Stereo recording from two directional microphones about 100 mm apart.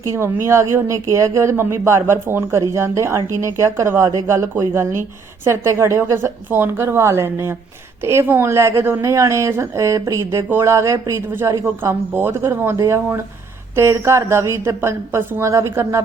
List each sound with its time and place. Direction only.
0.0 s speech: 30° right (ahead or behind)